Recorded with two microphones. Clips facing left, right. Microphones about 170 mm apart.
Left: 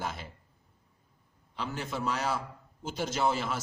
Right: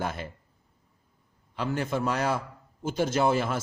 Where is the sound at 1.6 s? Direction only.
55° right (ahead or behind).